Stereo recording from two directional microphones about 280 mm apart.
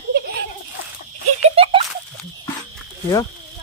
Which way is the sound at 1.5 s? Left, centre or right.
Centre.